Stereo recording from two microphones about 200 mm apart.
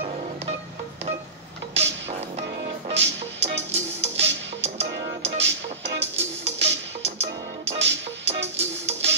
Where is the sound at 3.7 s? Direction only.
30° right (ahead or behind).